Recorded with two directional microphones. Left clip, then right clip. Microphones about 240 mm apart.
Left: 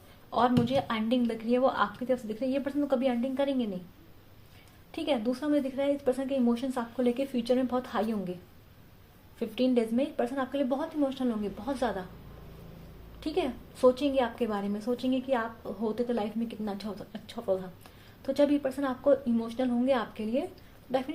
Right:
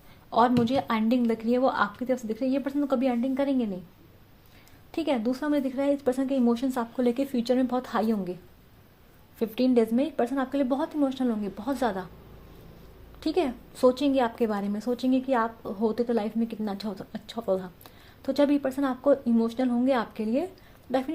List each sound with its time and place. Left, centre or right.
0.3 s a woman's voice: right
4.9 s a woman's voice: right
9.4 s a woman's voice: right
13.1 s a woman's voice: right